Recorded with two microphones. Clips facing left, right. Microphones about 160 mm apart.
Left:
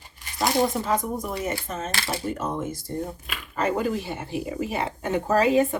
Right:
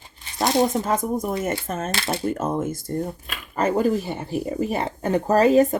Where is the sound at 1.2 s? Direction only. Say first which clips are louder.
Right 4 dB; 50° right (ahead or behind).